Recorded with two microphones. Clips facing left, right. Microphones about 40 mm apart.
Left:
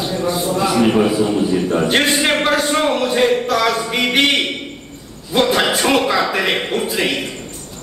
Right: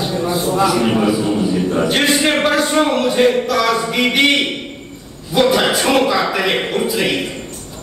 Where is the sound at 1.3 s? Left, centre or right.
Centre.